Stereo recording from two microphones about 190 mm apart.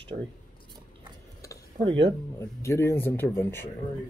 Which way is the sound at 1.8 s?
25° right (ahead or behind).